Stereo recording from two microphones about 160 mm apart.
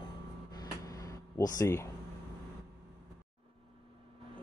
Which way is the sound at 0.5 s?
20° left (ahead or behind).